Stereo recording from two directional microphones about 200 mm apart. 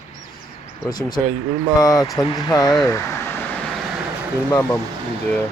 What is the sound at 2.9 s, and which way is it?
Vehicle, 15° left (ahead or behind).